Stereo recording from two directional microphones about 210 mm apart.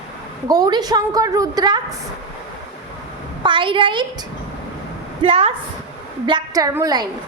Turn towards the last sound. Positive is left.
turn(degrees=-20)  # may be behind; listen again after turning